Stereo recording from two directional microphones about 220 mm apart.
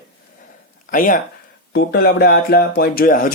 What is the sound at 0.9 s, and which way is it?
Speech, 40° left (ahead or behind).